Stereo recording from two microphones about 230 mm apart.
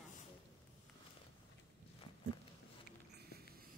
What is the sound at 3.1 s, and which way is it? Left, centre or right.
Sniff, right.